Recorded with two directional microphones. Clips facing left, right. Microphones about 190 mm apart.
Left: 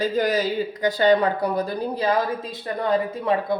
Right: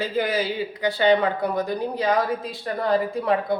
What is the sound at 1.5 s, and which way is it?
A woman's voice, 30° left (ahead or behind).